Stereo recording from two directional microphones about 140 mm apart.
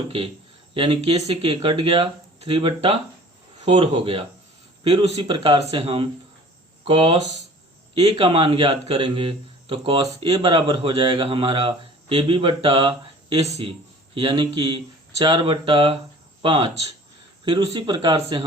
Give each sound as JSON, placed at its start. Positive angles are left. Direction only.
{"t": 0.7, "sound": "a man's voice", "side_deg": -40}
{"t": 8.2, "sound": "a man's voice", "side_deg": -40}